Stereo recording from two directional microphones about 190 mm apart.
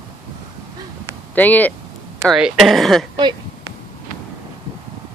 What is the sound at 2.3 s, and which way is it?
Speech, centre (ahead or behind).